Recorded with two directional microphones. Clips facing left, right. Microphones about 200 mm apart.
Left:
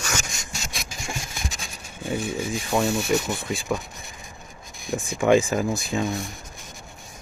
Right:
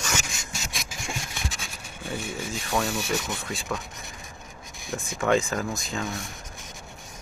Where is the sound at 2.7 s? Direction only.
10° left (ahead or behind).